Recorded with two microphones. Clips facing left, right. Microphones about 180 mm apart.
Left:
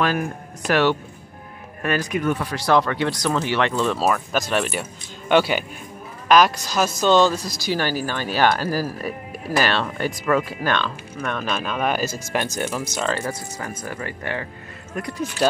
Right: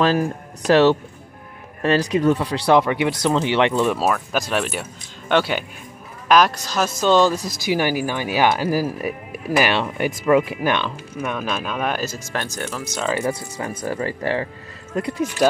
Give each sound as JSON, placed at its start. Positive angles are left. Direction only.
{"t": 0.0, "sound": "speech", "side_deg": -35}
{"t": 2.8, "sound": "speech", "side_deg": -15}
{"t": 4.0, "sound": "speech", "side_deg": -5}
{"t": 7.3, "sound": "speech", "side_deg": -20}
{"t": 13.0, "sound": "speech", "side_deg": -10}
{"t": 13.3, "sound": "speech", "side_deg": -30}